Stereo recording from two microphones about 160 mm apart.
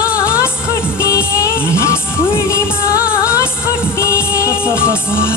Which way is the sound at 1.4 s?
20° left (ahead or behind).